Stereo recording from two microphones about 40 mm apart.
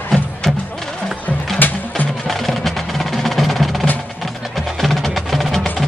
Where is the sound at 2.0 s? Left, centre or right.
Centre.